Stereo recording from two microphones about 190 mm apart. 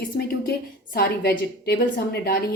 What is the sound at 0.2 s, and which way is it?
A woman's voice, 55° left (ahead or behind).